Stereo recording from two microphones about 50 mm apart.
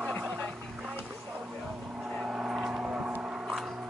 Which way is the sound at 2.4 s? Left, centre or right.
Centre.